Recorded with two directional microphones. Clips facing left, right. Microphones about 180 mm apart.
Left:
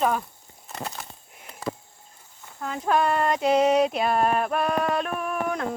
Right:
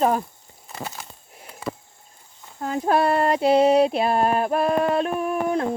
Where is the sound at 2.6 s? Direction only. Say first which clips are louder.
Right 3 dB; 35° right (ahead or behind).